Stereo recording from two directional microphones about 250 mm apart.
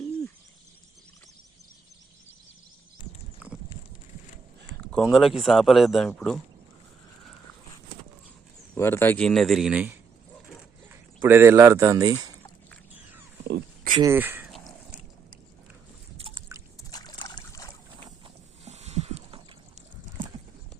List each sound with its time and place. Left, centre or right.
3.4 s a sound: centre
4.9 s speech: centre
8.7 s speech: centre
11.2 s speech: centre
13.5 s dog: right
14.0 s speech: centre
16.1 s boat: right
16.9 s boat: centre
18.6 s a sound: right